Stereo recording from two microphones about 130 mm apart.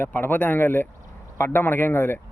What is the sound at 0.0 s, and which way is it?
A man's voice, 15° left (ahead or behind).